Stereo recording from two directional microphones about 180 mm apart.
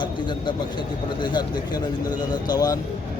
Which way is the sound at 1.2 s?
25° left (ahead or behind).